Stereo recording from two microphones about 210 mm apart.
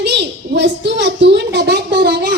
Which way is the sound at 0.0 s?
55° right (ahead or behind).